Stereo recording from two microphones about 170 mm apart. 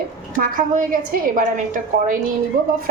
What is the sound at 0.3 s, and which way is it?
A woman's voice, 55° right (ahead or behind).